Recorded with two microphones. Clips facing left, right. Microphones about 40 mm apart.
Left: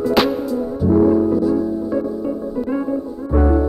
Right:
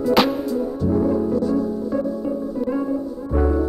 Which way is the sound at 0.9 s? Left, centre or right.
Centre.